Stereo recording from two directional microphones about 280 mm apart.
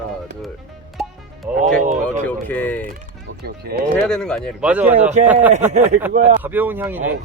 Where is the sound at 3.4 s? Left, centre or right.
Right.